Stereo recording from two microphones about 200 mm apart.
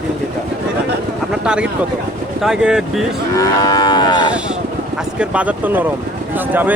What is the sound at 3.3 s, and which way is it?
Moo, 20° left (ahead or behind).